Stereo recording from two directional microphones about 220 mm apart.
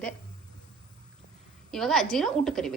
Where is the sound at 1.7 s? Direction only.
Centre (ahead or behind).